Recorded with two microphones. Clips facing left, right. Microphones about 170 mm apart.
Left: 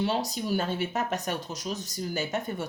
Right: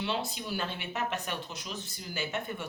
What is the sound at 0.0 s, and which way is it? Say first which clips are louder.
Speech: left 6 dB; 40° left (ahead or behind).